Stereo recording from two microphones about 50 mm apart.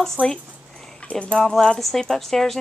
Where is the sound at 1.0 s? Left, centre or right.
Left.